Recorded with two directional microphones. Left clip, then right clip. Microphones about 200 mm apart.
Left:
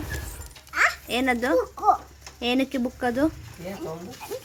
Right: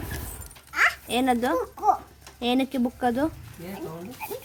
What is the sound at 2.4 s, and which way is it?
Speech, 5° right (ahead or behind).